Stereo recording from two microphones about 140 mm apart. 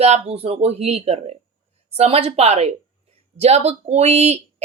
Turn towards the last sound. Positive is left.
turn(degrees=-50)  # may be behind; listen again after turning